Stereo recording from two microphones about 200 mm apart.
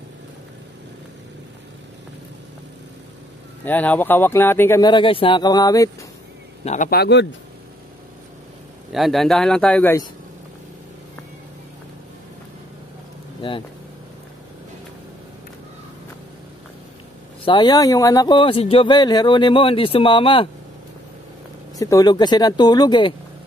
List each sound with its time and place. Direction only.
3.6 s speech: 10° left (ahead or behind)
6.6 s a man's voice: 35° left (ahead or behind)
6.9 s a man's voice: 55° left (ahead or behind)
8.9 s speech: centre (ahead or behind)
17.5 s speech: 20° left (ahead or behind)
21.7 s speech: 15° left (ahead or behind)